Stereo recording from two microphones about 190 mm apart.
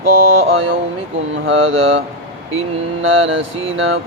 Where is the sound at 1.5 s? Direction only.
90° right.